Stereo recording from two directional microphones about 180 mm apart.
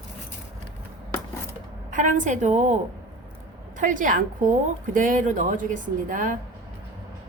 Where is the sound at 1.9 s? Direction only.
45° right (ahead or behind).